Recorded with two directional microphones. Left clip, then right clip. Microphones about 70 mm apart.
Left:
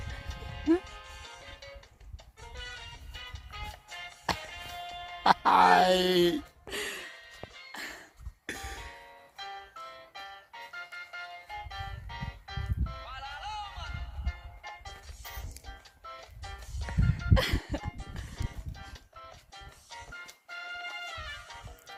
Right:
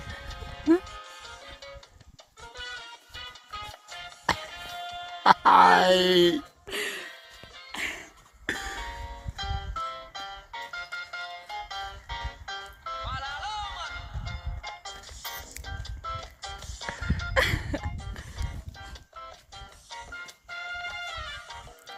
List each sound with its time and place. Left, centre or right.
0.1 s music: left
4.0 s music: left
6.7 s music: centre
7.1 s music: right
7.8 s music: centre
8.4 s music: left
8.9 s music: right
17.3 s music: right
17.7 s music: right